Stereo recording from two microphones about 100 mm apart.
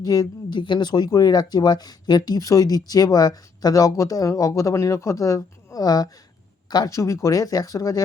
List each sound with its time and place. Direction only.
0.0 s speech: 40° left (ahead or behind)
0.6 s speech: 50° left (ahead or behind)